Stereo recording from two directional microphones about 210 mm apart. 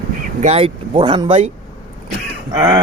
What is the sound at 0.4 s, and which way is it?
Speech, 30° right (ahead or behind).